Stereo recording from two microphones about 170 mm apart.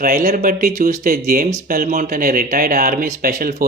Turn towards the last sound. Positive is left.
turn(degrees=-60)  # may be behind; listen again after turning